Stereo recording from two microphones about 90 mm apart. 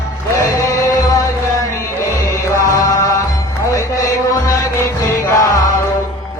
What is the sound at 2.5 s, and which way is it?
Mantra, 40° left (ahead or behind).